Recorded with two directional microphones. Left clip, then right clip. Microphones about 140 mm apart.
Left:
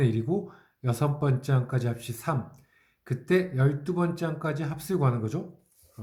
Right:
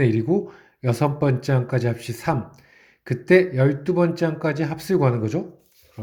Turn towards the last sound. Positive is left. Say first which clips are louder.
# right 8 dB
turn(degrees=-25)  # may be behind; listen again after turning